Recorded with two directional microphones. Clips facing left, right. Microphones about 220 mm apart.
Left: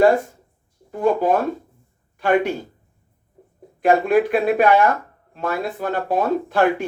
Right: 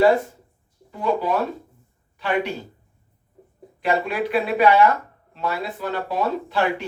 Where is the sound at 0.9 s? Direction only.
50° left (ahead or behind).